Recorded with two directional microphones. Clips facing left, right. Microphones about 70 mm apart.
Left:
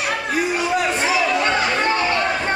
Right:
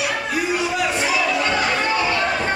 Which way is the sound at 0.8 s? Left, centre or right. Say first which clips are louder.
Left 1 dB; left.